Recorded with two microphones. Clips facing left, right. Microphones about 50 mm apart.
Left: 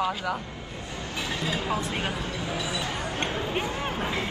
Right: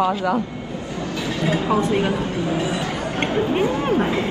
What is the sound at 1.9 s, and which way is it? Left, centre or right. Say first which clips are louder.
Speech: right 9 dB; right.